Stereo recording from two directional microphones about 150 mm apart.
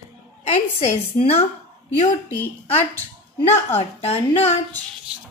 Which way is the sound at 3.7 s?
40° left (ahead or behind).